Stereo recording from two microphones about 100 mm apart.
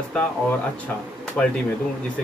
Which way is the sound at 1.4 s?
15° left (ahead or behind).